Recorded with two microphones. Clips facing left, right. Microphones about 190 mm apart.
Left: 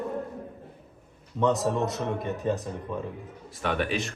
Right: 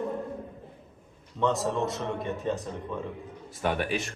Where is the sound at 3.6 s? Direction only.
45° right (ahead or behind).